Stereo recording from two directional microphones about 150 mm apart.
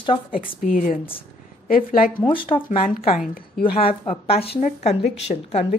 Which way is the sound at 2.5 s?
35° left (ahead or behind).